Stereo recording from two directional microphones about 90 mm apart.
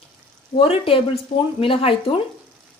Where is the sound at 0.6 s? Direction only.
90° left.